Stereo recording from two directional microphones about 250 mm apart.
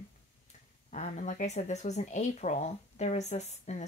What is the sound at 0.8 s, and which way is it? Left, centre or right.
Speech, left.